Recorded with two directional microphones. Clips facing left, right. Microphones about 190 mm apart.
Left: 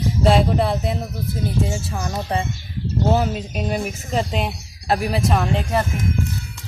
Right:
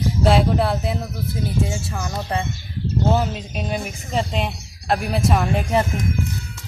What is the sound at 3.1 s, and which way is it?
Speech, 5° left (ahead or behind).